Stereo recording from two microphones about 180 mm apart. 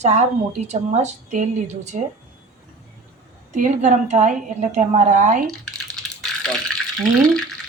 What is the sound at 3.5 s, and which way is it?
A woman's voice, 45° right (ahead or behind).